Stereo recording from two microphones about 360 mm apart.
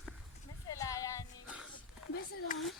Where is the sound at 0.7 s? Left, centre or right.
Centre.